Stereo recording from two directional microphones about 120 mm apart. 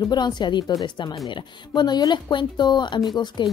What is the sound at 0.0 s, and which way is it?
Speech, 35° left (ahead or behind).